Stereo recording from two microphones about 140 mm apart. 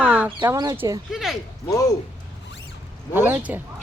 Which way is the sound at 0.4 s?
25° right (ahead or behind).